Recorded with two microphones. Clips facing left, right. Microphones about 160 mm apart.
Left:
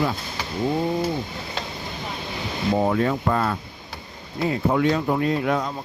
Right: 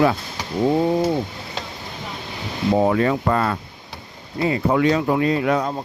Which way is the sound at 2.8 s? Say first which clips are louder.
Right 3 dB; 70° right (ahead or behind).